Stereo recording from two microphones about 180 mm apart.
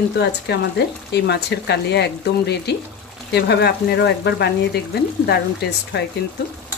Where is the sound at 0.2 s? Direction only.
70° left (ahead or behind).